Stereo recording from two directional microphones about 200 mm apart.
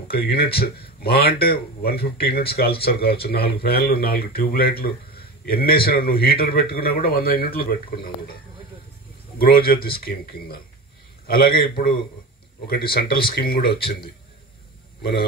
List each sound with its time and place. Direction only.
0.1 s a man's voice: 50° left (ahead or behind)
9.4 s speech: 50° left (ahead or behind)
15.0 s a man's voice: 50° left (ahead or behind)